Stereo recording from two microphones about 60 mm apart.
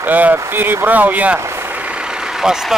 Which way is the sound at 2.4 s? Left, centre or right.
Centre.